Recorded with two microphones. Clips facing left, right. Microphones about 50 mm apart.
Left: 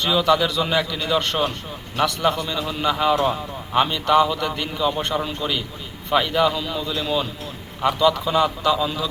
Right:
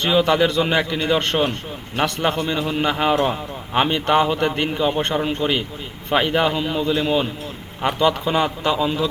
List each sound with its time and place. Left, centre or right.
0.1 s a man's voice: right